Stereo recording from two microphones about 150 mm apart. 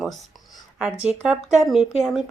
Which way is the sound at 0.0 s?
Centre (ahead or behind).